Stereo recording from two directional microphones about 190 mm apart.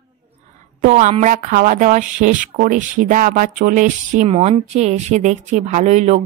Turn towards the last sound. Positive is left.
turn(degrees=-35)  # may be behind; listen again after turning